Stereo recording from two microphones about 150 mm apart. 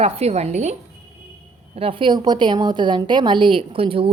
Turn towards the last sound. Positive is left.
turn(degrees=-35)  # may be behind; listen again after turning